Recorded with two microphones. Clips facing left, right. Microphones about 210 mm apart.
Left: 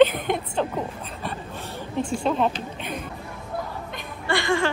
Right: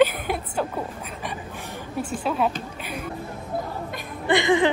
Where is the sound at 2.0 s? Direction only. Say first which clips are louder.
Left 2 dB; 5° right (ahead or behind).